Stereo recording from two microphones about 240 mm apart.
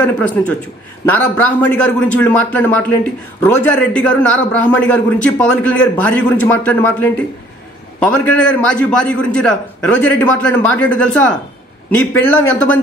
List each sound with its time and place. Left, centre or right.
0.0 s a man's voice: centre